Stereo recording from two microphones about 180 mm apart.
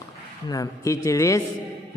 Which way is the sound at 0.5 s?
20° left (ahead or behind).